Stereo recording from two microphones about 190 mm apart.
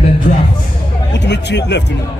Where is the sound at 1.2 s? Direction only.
65° left (ahead or behind).